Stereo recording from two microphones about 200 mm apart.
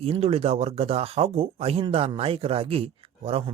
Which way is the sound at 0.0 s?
30° right (ahead or behind).